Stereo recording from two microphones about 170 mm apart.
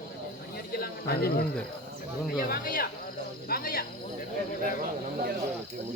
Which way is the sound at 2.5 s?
60° left (ahead or behind).